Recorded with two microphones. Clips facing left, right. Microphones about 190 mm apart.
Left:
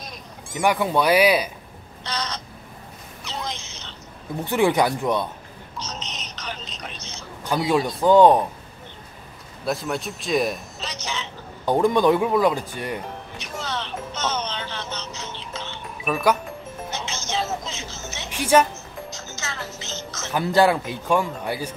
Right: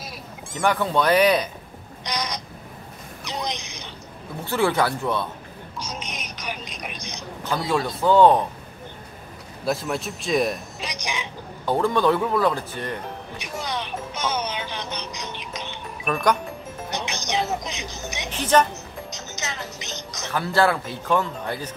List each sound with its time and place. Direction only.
0.6 s speech: 15° left (ahead or behind)
2.0 s speech: 15° right (ahead or behind)
4.5 s speech: 15° left (ahead or behind)
5.8 s music: 10° right (ahead or behind)
7.5 s speech: 15° left (ahead or behind)
9.7 s a man's voice: centre (ahead or behind)
10.8 s a sound: 15° right (ahead or behind)
11.6 s speech: 15° left (ahead or behind)
13.4 s music: 15° right (ahead or behind)
16.0 s speech: 5° left (ahead or behind)
16.9 s music: 15° right (ahead or behind)
18.3 s a woman's voice: 10° left (ahead or behind)
19.0 s music: 20° right (ahead or behind)
20.2 s speech: 15° left (ahead or behind)